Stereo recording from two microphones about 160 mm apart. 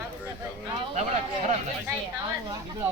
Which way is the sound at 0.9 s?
45° right (ahead or behind).